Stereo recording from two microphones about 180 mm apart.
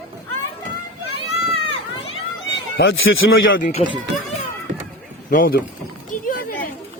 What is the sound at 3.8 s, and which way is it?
Speech, 30° left (ahead or behind).